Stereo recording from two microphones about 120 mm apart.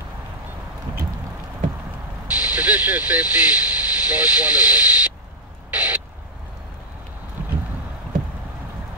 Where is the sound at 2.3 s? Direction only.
10° right (ahead or behind).